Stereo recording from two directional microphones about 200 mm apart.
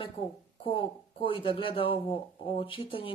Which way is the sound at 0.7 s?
25° left (ahead or behind).